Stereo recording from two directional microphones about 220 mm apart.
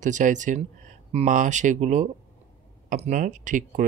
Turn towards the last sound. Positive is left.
turn(degrees=-35)  # may be behind; listen again after turning